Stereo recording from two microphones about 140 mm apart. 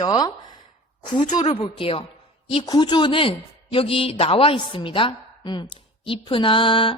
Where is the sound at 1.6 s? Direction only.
40° left (ahead or behind).